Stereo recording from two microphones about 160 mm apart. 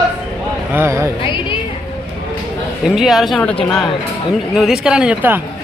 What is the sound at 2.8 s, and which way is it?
Speech, centre (ahead or behind).